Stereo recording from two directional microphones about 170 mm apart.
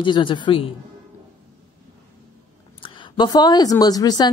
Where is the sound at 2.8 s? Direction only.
25° left (ahead or behind).